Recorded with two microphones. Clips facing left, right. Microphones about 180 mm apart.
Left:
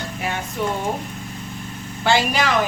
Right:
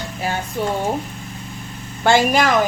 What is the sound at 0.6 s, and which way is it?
Speech, 35° right (ahead or behind).